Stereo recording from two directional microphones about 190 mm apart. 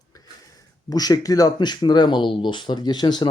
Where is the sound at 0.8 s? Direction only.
20° left (ahead or behind).